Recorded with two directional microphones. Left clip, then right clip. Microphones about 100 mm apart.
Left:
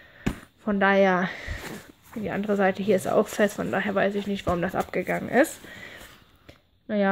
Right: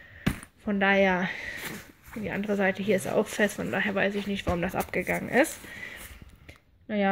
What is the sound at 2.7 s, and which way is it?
Speech, 30° left (ahead or behind).